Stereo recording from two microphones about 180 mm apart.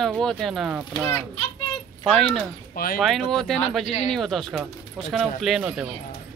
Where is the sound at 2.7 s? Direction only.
55° left (ahead or behind).